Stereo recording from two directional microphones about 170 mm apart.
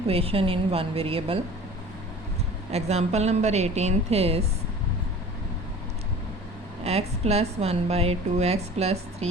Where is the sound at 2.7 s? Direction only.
40° right (ahead or behind).